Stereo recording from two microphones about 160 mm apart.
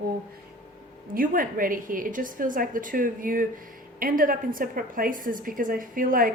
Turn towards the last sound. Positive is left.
turn(degrees=-60)  # may be behind; listen again after turning